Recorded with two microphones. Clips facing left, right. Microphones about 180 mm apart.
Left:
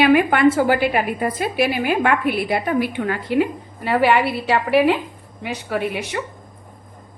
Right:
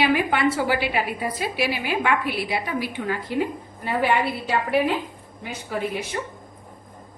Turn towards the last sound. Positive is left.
turn(degrees=70)  # may be behind; listen again after turning